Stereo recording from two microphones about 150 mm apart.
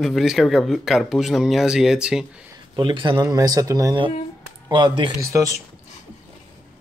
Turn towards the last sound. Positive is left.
turn(degrees=-20)  # may be behind; listen again after turning